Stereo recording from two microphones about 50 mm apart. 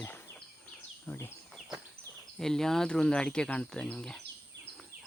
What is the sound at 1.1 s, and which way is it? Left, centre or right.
Speech, left.